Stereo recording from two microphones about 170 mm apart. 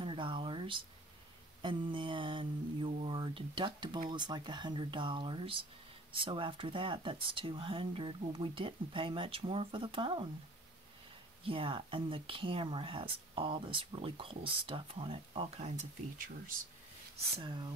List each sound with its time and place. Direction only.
0.0 s a sound: 30° right (ahead or behind)
1.6 s mantra: 30° right (ahead or behind)
6.1 s speech: 30° right (ahead or behind)
11.4 s speech: 30° right (ahead or behind); by 16.5 s 50° right (ahead or behind)
17.4 s mantra: 30° right (ahead or behind)